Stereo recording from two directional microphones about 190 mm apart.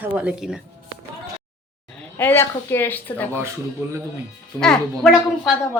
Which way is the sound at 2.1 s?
10° left (ahead or behind).